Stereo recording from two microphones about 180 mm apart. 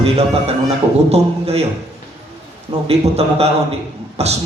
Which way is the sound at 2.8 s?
35° right (ahead or behind).